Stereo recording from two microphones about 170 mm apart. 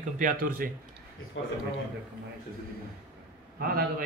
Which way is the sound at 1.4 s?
90° left.